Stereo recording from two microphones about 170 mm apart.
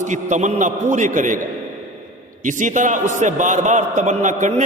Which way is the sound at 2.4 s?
50° right (ahead or behind).